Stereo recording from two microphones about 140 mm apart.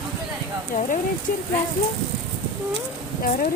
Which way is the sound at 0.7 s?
90° left.